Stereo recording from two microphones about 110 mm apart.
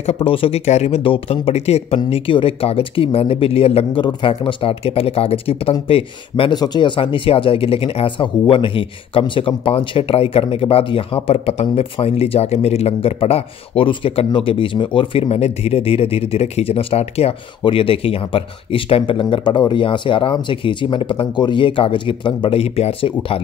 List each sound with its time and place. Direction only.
0.0 s speech: 65° left (ahead or behind)
0.7 s speech: 80° left; by 6.5 s 55° left (ahead or behind)
6.5 s speech: 40° left (ahead or behind)
7.0 s speech: 55° left (ahead or behind)
22.6 s speech: 65° left (ahead or behind)